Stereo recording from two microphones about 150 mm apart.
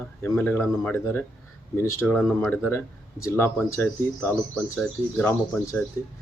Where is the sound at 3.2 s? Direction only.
15° left (ahead or behind).